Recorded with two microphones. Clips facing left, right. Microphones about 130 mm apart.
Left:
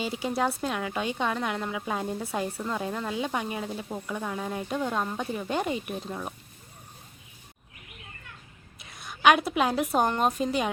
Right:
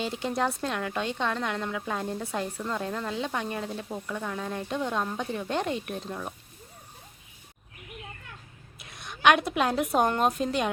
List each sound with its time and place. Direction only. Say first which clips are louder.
0.0 s a woman's voice: left 1 dB; 5° left (ahead or behind)
8.8 s a woman's voice: left 1 dB; centre (ahead or behind)